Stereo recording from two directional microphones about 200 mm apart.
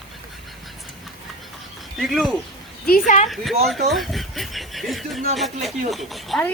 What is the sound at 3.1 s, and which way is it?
Speech, 35° left (ahead or behind).